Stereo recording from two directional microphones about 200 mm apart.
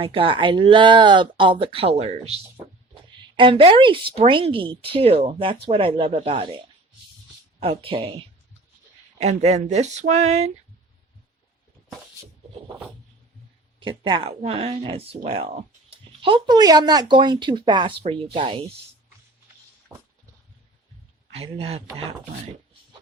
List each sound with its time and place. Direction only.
0.0 s speech: 25° right (ahead or behind)
7.6 s speech: 25° right (ahead or behind)
13.7 s speech: 25° right (ahead or behind)
21.3 s speech: 30° right (ahead or behind)